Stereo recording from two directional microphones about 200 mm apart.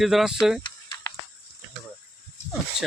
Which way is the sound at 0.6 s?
20° left (ahead or behind).